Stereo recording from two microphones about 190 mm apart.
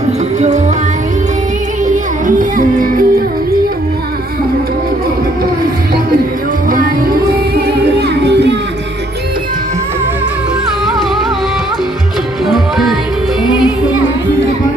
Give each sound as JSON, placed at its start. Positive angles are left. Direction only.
{"t": 1.9, "sound": "music", "side_deg": -45}
{"t": 6.7, "sound": "music", "side_deg": -50}